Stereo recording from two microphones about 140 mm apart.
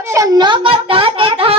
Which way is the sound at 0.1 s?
25° right (ahead or behind).